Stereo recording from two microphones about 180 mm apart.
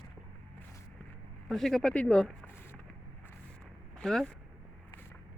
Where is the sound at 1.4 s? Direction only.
Centre (ahead or behind).